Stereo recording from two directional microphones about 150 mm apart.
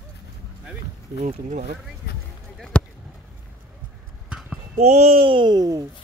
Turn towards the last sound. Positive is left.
turn(degrees=-25)  # may be behind; listen again after turning